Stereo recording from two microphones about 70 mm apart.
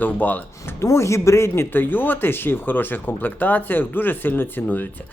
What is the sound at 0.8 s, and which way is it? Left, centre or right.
Speech, left.